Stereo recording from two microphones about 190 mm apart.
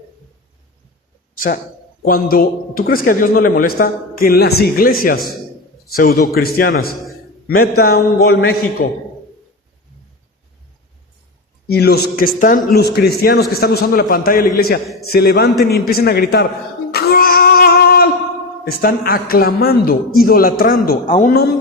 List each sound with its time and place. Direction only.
2.0 s a man's voice: 50° left (ahead or behind)
11.7 s a man's voice: 55° left (ahead or behind)
12.7 s a man's voice: 55° left (ahead or behind)
16.9 s a sound: 55° left (ahead or behind)
18.7 s a man's voice: 50° left (ahead or behind)